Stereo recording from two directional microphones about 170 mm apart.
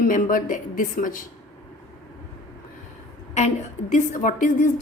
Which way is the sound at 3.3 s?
45° left (ahead or behind).